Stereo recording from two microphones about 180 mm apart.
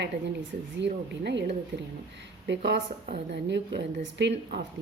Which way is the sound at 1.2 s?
65° right (ahead or behind).